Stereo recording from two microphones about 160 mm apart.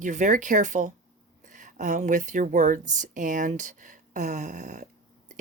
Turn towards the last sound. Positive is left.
turn(degrees=-50)  # may be behind; listen again after turning